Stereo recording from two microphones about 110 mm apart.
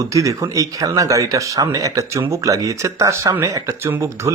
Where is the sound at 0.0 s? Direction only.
30° right (ahead or behind).